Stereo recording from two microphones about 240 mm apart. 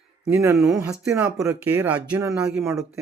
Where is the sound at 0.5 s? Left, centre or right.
Centre.